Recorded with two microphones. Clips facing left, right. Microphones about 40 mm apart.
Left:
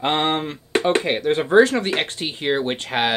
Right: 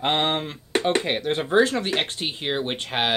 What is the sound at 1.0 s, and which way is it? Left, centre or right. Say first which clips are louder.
Speech: left 4 dB; centre.